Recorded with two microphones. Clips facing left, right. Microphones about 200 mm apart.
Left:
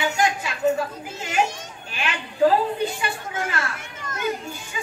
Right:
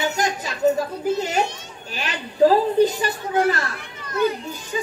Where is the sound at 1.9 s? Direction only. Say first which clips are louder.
Even; 40° right (ahead or behind).